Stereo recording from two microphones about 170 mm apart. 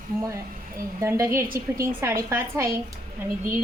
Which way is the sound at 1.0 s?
20° right (ahead or behind).